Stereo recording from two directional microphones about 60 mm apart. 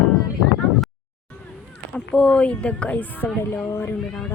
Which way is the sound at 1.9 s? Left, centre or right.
Centre.